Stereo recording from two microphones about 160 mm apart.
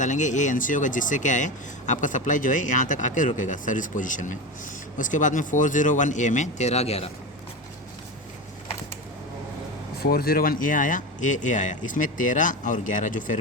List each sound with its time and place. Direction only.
0.0 s speech: 50° left (ahead or behind)
10.0 s speech: 75° left (ahead or behind); by 13.3 s 55° left (ahead or behind)